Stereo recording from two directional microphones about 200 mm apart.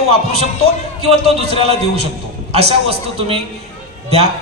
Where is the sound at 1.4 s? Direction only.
30° right (ahead or behind).